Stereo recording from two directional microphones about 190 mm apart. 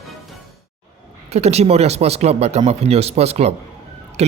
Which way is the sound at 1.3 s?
35° right (ahead or behind).